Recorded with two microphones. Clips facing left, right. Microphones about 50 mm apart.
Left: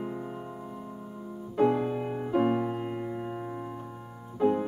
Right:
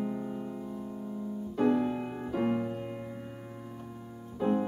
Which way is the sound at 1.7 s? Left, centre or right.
Centre.